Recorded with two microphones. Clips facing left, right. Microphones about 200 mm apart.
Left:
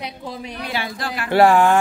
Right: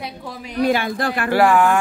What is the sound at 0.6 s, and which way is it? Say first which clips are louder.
Speech: right 12 dB; 50° right (ahead or behind).